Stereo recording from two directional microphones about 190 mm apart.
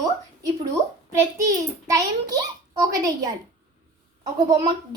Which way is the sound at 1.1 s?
15° right (ahead or behind).